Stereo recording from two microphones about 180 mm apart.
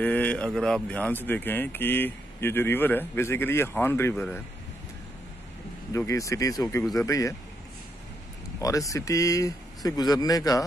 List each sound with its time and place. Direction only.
0.0 s speech: 10° left (ahead or behind)
5.9 s speech: 15° left (ahead or behind)
8.5 s speech: 20° left (ahead or behind)